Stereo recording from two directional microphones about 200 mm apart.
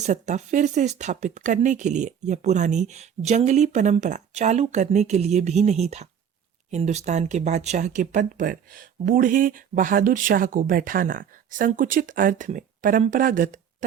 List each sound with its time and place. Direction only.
0.0 s speech: 35° right (ahead or behind)